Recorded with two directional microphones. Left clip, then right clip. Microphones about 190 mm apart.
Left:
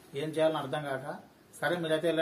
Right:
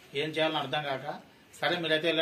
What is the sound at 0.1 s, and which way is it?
A man's voice, 15° left (ahead or behind).